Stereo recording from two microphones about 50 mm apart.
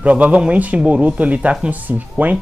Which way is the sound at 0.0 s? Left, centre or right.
Right.